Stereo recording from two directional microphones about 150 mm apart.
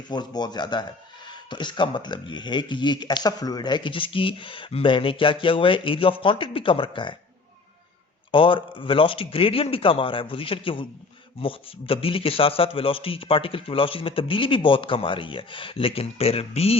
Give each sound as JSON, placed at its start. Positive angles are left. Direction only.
{"t": 0.1, "sound": "speech", "side_deg": 30}
{"t": 8.3, "sound": "speech", "side_deg": 35}